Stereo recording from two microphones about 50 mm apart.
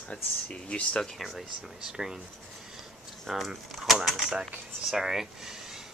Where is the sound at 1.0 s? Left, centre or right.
Centre.